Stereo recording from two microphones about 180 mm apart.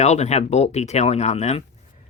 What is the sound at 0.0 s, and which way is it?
Speech, 40° left (ahead or behind).